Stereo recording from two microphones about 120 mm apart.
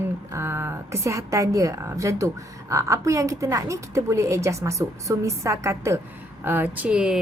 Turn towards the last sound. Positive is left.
turn(degrees=-5)  # may be behind; listen again after turning